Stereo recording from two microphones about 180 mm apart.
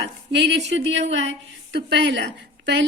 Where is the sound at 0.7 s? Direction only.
90° right.